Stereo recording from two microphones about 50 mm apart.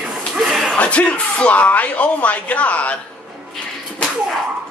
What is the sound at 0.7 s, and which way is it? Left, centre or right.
Speech, left.